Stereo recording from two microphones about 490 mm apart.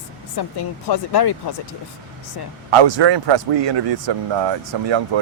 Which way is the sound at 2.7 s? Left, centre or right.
Right.